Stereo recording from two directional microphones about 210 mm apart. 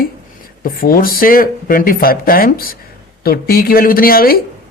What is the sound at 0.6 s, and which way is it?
Speech, 45° left (ahead or behind).